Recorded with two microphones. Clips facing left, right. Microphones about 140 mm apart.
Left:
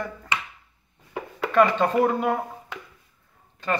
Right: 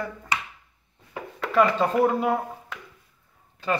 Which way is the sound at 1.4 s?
Centre (ahead or behind).